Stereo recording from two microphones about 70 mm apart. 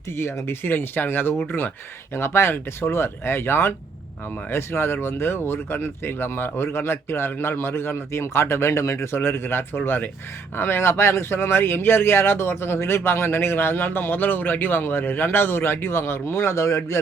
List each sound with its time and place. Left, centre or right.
0.2 s speech: left
9.2 s speech: left